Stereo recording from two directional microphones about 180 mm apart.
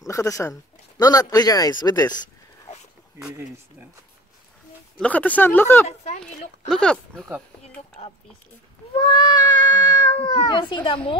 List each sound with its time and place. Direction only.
0.0 s speech: 20° left (ahead or behind)
3.2 s speech: 5° right (ahead or behind)
4.9 s speech: 5° left (ahead or behind)
5.9 s speech: 40° left (ahead or behind)
6.7 s speech: 5° left (ahead or behind)
8.9 s speech: 25° left (ahead or behind)